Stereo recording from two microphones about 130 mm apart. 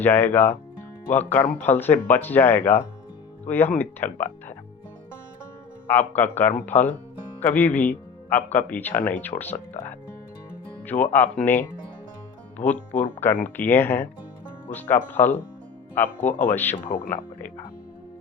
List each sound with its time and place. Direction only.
0.0 s speech: 15° left (ahead or behind)
1.5 s speech: 15° left (ahead or behind)
5.9 s speech: 15° left (ahead or behind)
12.6 s speech: 15° left (ahead or behind)